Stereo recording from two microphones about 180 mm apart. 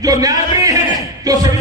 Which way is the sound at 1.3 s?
20° right (ahead or behind).